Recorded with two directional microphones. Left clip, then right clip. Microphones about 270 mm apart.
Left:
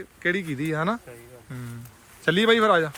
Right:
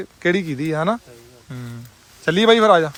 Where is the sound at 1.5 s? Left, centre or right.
Centre.